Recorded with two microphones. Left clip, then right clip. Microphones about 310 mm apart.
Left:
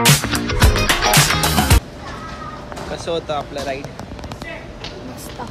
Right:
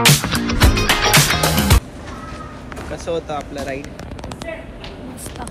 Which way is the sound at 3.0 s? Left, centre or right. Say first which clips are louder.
Left 1 dB; centre.